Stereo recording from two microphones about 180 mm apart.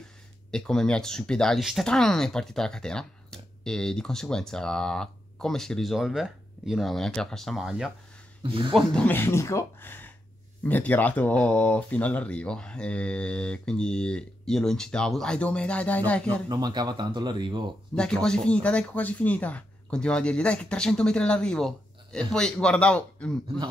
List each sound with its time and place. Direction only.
0.5 s speech: 5° left (ahead or behind)
8.4 s speech: 30° right (ahead or behind)
8.7 s speech: 5° left (ahead or behind)
16.4 s speech: 25° right (ahead or behind)
17.9 s speech: 5° left (ahead or behind)